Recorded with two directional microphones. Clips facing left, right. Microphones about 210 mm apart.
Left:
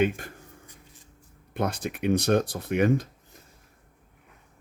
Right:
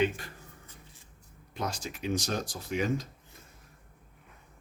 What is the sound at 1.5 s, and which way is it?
Speech, 55° left (ahead or behind).